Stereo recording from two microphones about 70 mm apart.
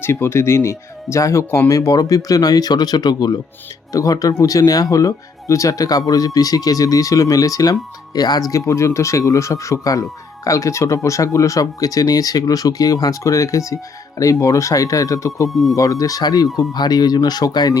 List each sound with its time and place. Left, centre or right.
0.0 s speech: left
3.9 s speech: left
15.4 s speech: centre
15.7 s speech: left
16.7 s speech: left